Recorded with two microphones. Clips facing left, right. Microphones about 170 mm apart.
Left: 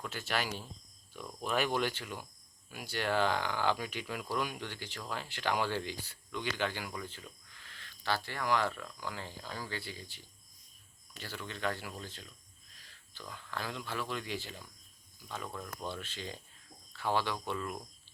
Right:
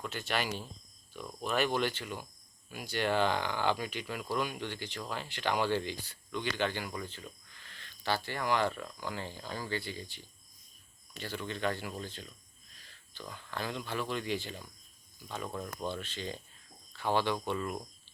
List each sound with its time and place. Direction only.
0.0 s speech: 5° left (ahead or behind)
15.5 s speech: 20° right (ahead or behind)
15.9 s speech: 10° left (ahead or behind)